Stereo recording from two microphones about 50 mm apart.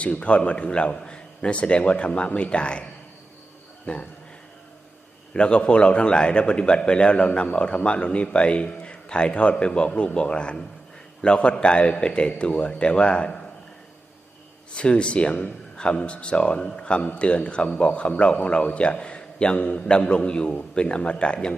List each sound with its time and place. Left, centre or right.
0.0 s a man's voice: left
3.9 s a man's voice: left
5.3 s a man's voice: left
14.8 s a man's voice: left